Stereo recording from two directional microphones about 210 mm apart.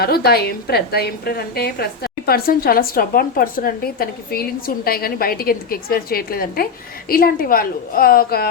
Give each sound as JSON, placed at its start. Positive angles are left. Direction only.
{"t": 0.0, "sound": "a woman's voice", "side_deg": 45}